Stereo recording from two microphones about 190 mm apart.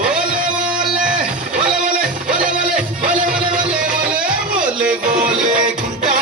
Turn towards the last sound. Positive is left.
turn(degrees=-45)  # may be behind; listen again after turning